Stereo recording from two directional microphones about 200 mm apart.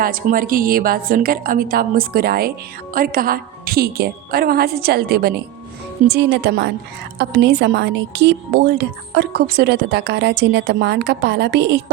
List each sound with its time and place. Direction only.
0.0 s a woman's voice: 45° right (ahead or behind)